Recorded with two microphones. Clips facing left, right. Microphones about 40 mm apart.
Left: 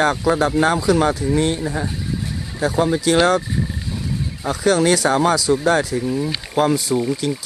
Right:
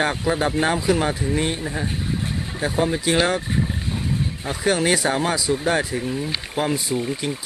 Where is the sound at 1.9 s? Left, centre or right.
Right.